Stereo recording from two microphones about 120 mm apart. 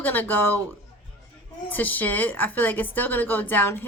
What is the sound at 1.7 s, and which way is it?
A woman's voice, 15° left (ahead or behind).